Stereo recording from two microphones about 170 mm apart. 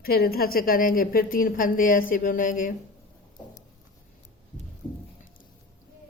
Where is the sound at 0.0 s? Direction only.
65° left (ahead or behind).